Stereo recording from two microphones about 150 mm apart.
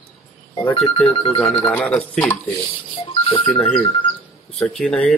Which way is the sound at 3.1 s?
35° left (ahead or behind).